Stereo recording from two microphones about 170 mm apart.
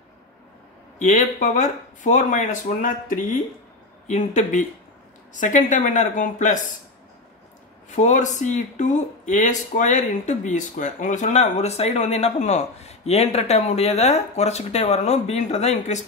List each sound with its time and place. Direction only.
0.9 s speech: 45° left (ahead or behind)
7.9 s speech: 45° left (ahead or behind)